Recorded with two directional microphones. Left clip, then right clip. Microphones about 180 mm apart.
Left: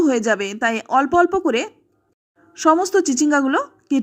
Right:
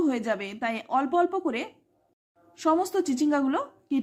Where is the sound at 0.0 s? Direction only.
30° left (ahead or behind).